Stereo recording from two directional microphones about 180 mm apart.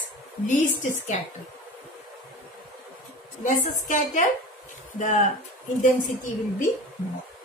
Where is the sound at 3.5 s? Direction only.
45° left (ahead or behind).